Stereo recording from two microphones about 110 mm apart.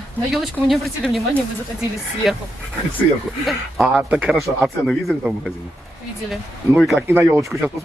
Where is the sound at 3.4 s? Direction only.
Centre (ahead or behind).